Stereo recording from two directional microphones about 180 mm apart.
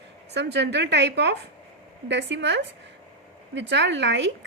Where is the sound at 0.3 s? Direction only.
70° right (ahead or behind).